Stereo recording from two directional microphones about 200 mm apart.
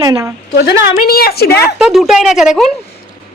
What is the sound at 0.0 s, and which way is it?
Speech, 15° right (ahead or behind).